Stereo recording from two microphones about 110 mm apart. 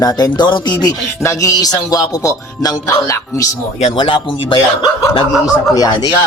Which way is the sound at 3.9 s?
50° left (ahead or behind).